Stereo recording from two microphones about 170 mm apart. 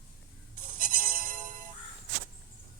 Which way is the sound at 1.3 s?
55° right (ahead or behind).